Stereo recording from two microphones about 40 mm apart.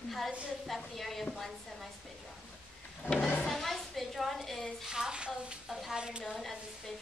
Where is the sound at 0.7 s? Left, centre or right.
Centre.